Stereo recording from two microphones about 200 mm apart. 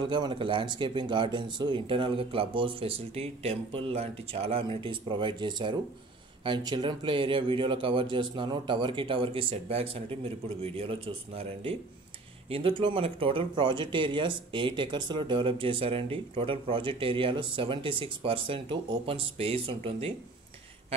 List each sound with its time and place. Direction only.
0.0 s speech: 25° right (ahead or behind)